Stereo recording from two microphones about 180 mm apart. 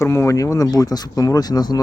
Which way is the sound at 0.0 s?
15° left (ahead or behind).